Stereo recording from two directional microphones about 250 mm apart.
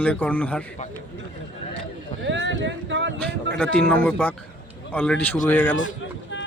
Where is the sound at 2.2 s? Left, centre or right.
Right.